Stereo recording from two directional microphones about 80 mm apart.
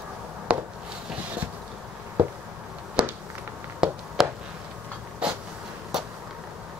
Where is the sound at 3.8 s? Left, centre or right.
Centre.